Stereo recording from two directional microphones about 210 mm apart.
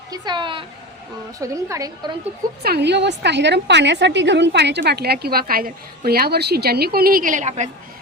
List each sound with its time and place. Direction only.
0.1 s a woman's voice: 20° right (ahead or behind)
2.6 s a woman's voice: 50° right (ahead or behind); by 7.7 s 35° right (ahead or behind)